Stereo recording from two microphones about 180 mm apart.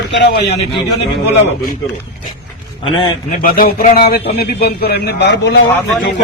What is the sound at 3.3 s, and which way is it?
A man's voice, 50° left (ahead or behind).